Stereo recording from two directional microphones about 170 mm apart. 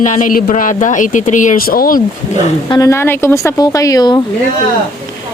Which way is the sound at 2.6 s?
20° left (ahead or behind).